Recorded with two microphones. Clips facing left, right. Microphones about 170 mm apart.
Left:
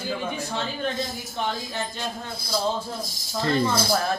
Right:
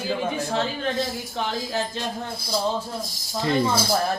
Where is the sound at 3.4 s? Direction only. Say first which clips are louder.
Right 1 dB; 15° right (ahead or behind).